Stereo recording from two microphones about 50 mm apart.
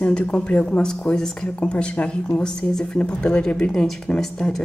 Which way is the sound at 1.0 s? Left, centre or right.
Centre.